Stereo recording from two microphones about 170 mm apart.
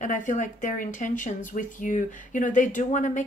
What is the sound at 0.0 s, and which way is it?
Speech, 45° left (ahead or behind).